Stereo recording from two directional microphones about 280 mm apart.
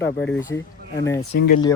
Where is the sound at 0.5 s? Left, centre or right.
Centre.